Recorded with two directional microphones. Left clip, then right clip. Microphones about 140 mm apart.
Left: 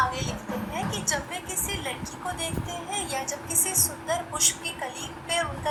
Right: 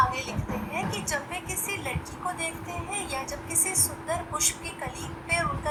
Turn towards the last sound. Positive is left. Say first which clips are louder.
# even
turn(degrees=0)  # may be behind; listen again after turning